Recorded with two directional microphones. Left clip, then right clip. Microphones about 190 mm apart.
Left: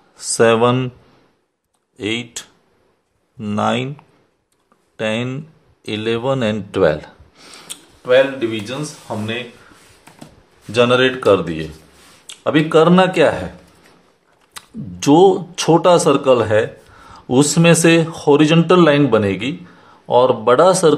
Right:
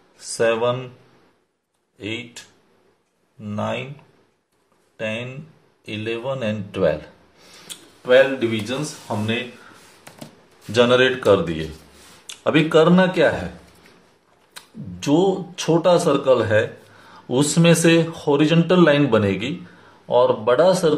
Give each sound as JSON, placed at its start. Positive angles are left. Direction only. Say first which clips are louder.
{"t": 0.2, "sound": "speech", "louder": "left 7 dB", "side_deg": 45}
{"t": 2.0, "sound": "speech", "louder": "left 7 dB", "side_deg": 50}
{"t": 4.9, "sound": "speech", "louder": "left 6 dB", "side_deg": 50}
{"t": 8.0, "sound": "speech", "louder": "left 1 dB", "side_deg": 15}
{"t": 10.7, "sound": "speech", "louder": "left 2 dB", "side_deg": 20}
{"t": 12.3, "sound": "a sound", "louder": "left 2 dB", "side_deg": 10}
{"t": 12.7, "sound": "speech", "louder": "left 5 dB", "side_deg": 30}
{"t": 14.5, "sound": "speech", "louder": "left 5 dB", "side_deg": 40}
{"t": 20.1, "sound": "speech", "louder": "left 4 dB", "side_deg": 35}